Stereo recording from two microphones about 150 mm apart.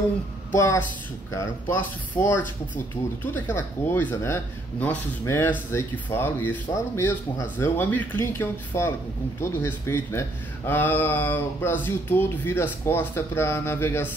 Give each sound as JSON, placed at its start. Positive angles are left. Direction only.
{"t": 0.6, "sound": "a woman's voice", "side_deg": 20}